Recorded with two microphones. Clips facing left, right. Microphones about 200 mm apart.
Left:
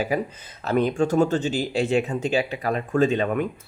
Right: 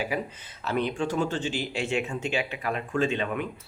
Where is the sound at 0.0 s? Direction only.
45° left (ahead or behind).